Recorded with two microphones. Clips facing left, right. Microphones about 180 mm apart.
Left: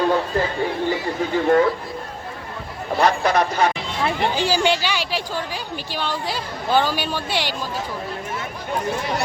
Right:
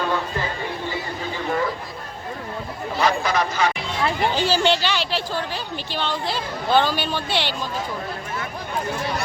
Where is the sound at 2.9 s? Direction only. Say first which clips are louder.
Left 3 dB; 55° left (ahead or behind).